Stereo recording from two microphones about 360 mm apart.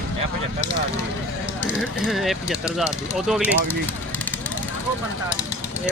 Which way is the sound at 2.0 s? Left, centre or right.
Centre.